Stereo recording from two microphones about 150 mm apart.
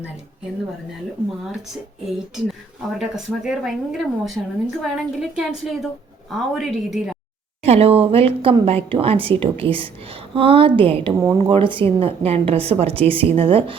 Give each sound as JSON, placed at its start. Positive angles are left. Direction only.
{"t": 2.9, "sound": "speech", "side_deg": -5}
{"t": 7.6, "sound": "a woman's voice", "side_deg": -45}
{"t": 11.2, "sound": "speech", "side_deg": -20}
{"t": 11.5, "sound": "a woman's voice", "side_deg": -35}